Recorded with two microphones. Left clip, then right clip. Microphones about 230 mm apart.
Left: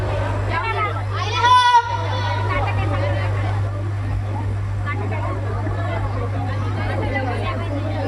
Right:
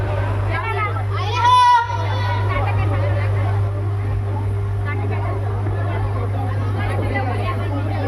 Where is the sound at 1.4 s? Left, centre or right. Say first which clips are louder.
Right 1 dB; left.